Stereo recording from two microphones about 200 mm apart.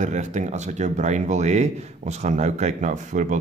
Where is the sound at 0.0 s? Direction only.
35° right (ahead or behind).